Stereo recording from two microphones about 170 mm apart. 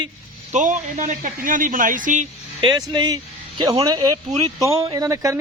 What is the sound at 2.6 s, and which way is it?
A man's voice, 25° right (ahead or behind).